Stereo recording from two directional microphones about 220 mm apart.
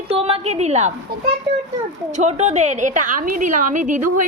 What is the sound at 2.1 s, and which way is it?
A woman's voice, 30° right (ahead or behind).